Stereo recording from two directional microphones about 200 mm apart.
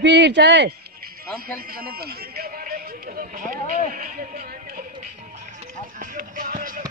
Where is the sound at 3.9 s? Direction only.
45° right (ahead or behind).